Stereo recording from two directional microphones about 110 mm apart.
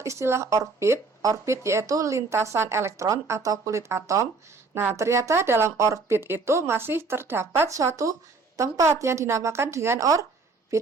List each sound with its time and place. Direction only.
0.0 s speech: 25° right (ahead or behind)